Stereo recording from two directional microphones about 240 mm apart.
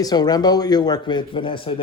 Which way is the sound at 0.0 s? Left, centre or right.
Centre.